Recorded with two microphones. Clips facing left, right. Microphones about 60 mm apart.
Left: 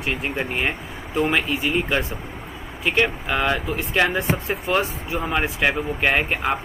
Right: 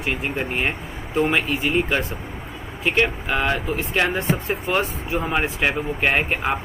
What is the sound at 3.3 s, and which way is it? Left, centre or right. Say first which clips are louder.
Speech: even; centre.